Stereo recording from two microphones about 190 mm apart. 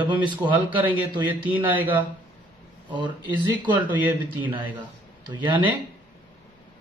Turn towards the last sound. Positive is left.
turn(degrees=-10)  # may be behind; listen again after turning